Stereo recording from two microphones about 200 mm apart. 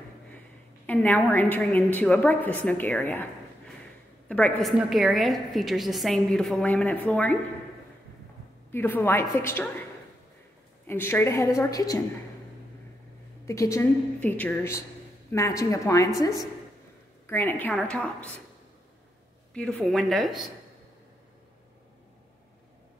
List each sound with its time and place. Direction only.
0.8 s a woman's voice: 10° left (ahead or behind)
8.7 s a woman's voice: 10° left (ahead or behind)
10.9 s a woman's voice: 10° left (ahead or behind)
13.5 s a woman's voice: 15° left (ahead or behind)
17.3 s a woman's voice: 10° left (ahead or behind)
19.5 s a woman's voice: 5° left (ahead or behind)